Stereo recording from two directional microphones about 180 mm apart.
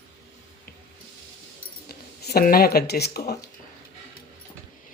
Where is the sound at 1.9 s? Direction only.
60° left (ahead or behind).